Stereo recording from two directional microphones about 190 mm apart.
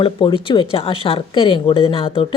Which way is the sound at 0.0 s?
30° left (ahead or behind).